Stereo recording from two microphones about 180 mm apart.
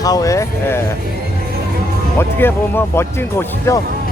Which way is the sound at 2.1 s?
15° left (ahead or behind).